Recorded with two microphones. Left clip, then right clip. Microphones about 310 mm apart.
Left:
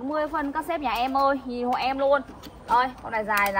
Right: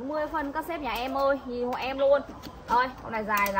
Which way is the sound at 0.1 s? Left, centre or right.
Centre.